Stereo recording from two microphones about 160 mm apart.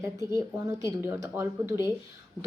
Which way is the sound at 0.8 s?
15° right (ahead or behind).